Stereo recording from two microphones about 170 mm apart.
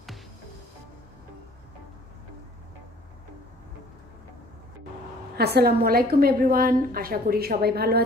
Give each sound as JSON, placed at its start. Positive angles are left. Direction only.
{"t": 5.4, "sound": "a woman's voice", "side_deg": -65}